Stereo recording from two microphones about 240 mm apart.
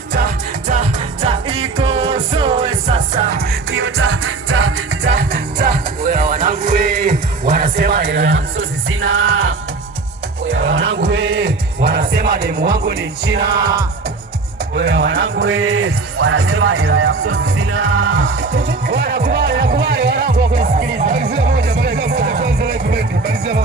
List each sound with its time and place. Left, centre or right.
0.7 s music: right
3.3 s music: right
8.9 s music: right
14.8 s music: right
18.3 s music: right